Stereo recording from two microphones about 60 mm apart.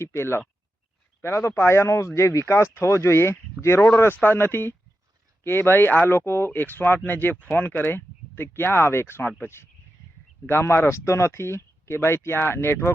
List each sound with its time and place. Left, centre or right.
0.0 s speech: left
3.6 s speech: right
3.9 s speech: left